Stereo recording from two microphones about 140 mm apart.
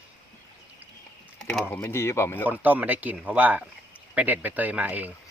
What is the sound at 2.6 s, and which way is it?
Speech, 10° right (ahead or behind).